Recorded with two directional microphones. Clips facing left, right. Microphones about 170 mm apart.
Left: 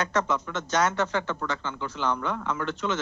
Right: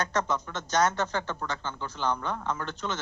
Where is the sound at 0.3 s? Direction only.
40° right (ahead or behind).